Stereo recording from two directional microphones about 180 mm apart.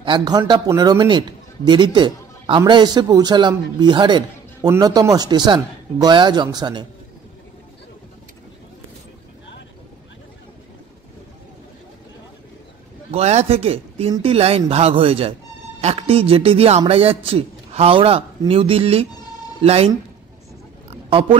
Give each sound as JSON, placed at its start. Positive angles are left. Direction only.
{"t": 0.0, "sound": "a man's voice", "side_deg": -25}
{"t": 13.1, "sound": "a man's voice", "side_deg": -35}
{"t": 21.1, "sound": "speech", "side_deg": -30}